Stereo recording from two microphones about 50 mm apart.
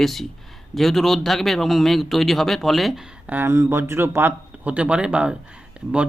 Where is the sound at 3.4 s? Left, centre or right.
Right.